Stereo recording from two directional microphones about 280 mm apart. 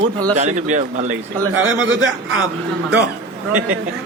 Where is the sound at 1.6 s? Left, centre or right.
Right.